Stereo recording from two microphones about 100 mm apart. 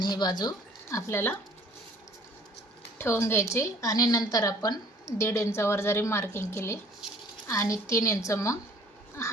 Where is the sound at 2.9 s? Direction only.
25° left (ahead or behind).